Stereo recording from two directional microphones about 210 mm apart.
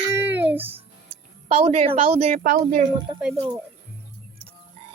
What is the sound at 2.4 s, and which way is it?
Speech, 40° right (ahead or behind).